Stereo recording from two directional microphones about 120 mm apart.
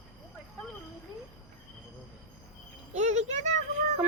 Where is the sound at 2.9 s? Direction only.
75° right (ahead or behind).